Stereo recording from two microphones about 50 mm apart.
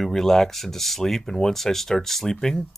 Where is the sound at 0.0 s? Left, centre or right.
Centre.